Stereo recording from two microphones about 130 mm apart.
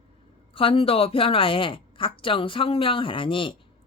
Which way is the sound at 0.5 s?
45° left (ahead or behind).